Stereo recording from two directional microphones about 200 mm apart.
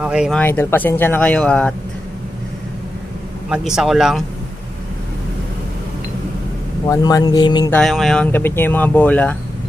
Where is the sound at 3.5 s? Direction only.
Centre (ahead or behind).